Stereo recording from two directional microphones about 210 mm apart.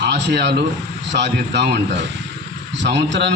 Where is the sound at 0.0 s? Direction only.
55° right (ahead or behind).